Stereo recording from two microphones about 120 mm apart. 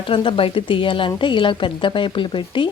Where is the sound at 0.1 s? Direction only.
45° left (ahead or behind).